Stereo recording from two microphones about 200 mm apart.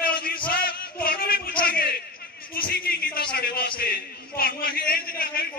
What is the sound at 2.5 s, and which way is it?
A man's voice, 50° left (ahead or behind).